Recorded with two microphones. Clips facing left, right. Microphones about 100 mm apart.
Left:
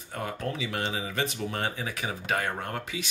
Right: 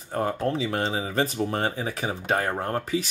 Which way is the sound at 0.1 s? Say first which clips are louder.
Right 7 dB; 35° right (ahead or behind).